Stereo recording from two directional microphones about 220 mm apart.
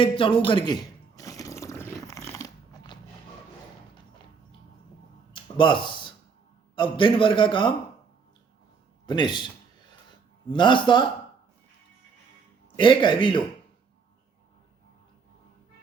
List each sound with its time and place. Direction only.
0.0 s a sound: 25° left (ahead or behind)
5.3 s a sound: 20° left (ahead or behind)
6.7 s a man's voice: 20° left (ahead or behind)
9.0 s a man's voice: 20° left (ahead or behind)
10.5 s a man's voice: 20° left (ahead or behind)
12.7 s a man's voice: 20° left (ahead or behind)